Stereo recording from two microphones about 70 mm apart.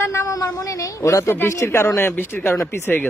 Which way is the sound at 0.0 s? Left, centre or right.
Left.